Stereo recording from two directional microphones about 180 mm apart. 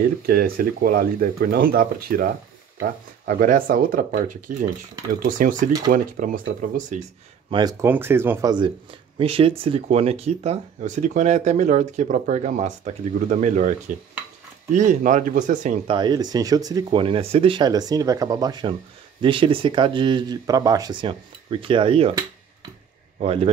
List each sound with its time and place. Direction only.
0.3 s speech: 55° right (ahead or behind)
7.8 s speech: 10° right (ahead or behind); by 15.8 s 45° right (ahead or behind)
15.9 s speech: 25° right (ahead or behind)